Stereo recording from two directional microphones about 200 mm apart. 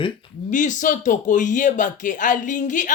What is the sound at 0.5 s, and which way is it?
Speech, 40° left (ahead or behind).